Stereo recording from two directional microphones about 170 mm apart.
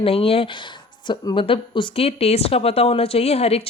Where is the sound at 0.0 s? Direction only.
35° left (ahead or behind).